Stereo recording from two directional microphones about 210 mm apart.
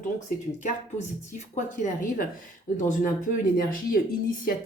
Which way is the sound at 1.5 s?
35° left (ahead or behind).